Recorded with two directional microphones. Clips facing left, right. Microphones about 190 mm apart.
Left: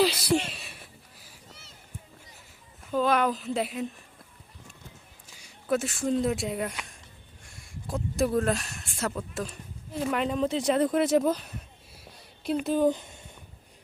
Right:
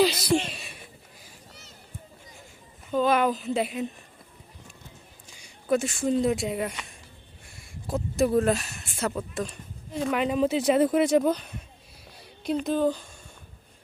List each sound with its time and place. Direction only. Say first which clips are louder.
0.0 s a sound: right 2 dB; 5° left (ahead or behind)
2.9 s speech: right 2 dB; centre (ahead or behind)
5.3 s speech: right 3 dB; centre (ahead or behind)
12.9 s speech: left 2 dB; 20° left (ahead or behind)